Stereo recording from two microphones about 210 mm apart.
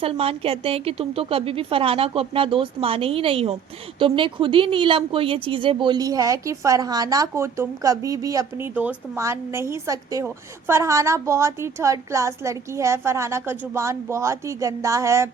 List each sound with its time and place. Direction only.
0.0 s a woman's voice: 25° right (ahead or behind)